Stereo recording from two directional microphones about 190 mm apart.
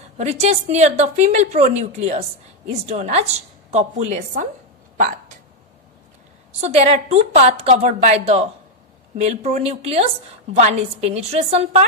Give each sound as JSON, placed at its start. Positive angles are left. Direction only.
{"t": 0.2, "sound": "a woman's voice", "side_deg": -35}
{"t": 6.6, "sound": "a woman's voice", "side_deg": -35}